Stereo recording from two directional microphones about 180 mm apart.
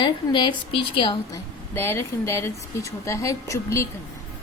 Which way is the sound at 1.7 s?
15° left (ahead or behind).